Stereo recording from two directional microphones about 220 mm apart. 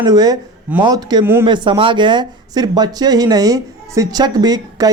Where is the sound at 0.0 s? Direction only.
15° right (ahead or behind).